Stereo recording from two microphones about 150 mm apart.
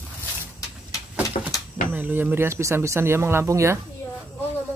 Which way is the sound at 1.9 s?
10° right (ahead or behind).